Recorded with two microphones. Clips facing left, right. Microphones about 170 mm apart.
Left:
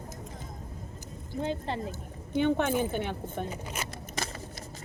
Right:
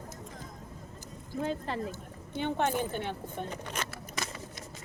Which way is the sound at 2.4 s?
55° left (ahead or behind).